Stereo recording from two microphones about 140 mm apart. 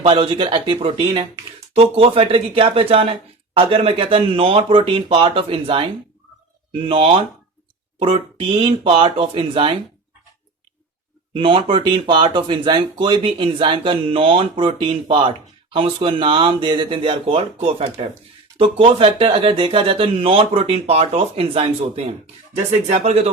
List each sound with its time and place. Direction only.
0.0 s speech: 35° right (ahead or behind)
11.3 s speech: 40° right (ahead or behind)